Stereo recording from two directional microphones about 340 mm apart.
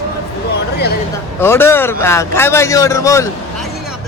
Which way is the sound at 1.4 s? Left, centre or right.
Centre.